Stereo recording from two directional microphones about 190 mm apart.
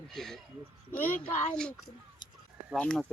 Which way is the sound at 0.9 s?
40° left (ahead or behind).